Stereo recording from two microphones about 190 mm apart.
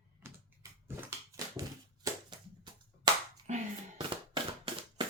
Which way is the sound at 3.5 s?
40° right (ahead or behind).